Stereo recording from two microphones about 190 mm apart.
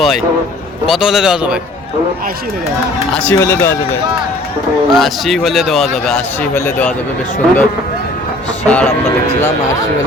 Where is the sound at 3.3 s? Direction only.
15° left (ahead or behind).